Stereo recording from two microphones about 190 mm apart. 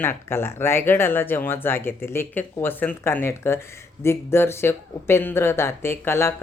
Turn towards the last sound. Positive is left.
turn(degrees=15)  # may be behind; listen again after turning